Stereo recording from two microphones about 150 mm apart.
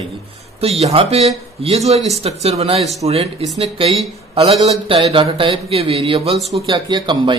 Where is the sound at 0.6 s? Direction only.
45° right (ahead or behind).